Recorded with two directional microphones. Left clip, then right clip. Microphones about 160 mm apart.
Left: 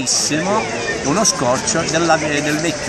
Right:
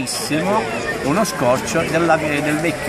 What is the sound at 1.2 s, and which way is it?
Speech, 15° right (ahead or behind).